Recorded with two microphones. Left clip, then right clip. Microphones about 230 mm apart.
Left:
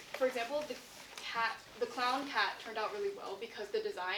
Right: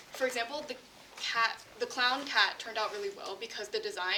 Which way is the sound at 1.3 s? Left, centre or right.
Right.